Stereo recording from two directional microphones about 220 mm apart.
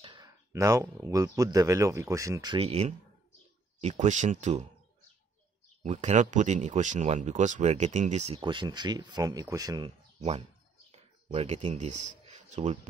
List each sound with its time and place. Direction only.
0.0 s speech: 20° right (ahead or behind)
5.8 s speech: 35° right (ahead or behind)
10.9 s a sound: 30° right (ahead or behind)